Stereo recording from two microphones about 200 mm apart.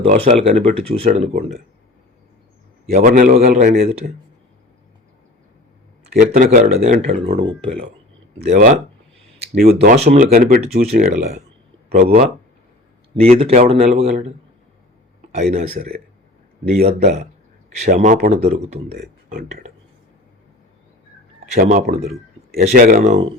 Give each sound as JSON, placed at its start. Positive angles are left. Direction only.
{"t": 0.0, "sound": "speech", "side_deg": -30}
{"t": 2.9, "sound": "speech", "side_deg": -35}
{"t": 6.1, "sound": "speech", "side_deg": -40}
{"t": 8.4, "sound": "speech", "side_deg": -40}
{"t": 10.3, "sound": "speech", "side_deg": -50}
{"t": 11.9, "sound": "speech", "side_deg": -50}
{"t": 13.1, "sound": "speech", "side_deg": -30}
{"t": 15.4, "sound": "speech", "side_deg": -35}
{"t": 17.9, "sound": "speech", "side_deg": -45}
{"t": 18.9, "sound": "speech", "side_deg": -45}
{"t": 21.6, "sound": "speech", "side_deg": -50}